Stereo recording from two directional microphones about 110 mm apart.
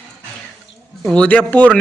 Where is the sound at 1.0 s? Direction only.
10° left (ahead or behind).